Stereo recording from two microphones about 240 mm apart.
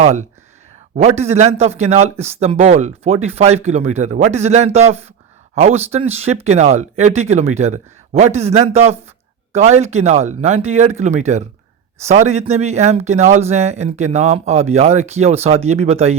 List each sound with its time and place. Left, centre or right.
0.0 s a man's voice: right